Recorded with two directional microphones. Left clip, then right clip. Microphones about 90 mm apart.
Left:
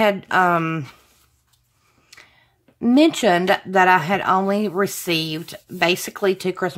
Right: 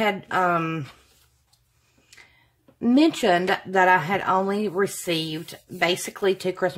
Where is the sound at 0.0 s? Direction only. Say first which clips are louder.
Left 5 dB; 45° left (ahead or behind).